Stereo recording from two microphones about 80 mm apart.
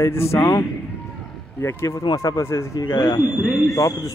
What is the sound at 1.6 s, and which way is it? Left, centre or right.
Speech, left.